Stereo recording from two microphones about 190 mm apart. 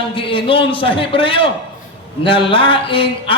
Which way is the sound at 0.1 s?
30° left (ahead or behind).